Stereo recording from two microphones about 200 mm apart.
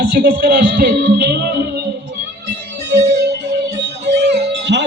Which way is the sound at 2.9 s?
55° right (ahead or behind).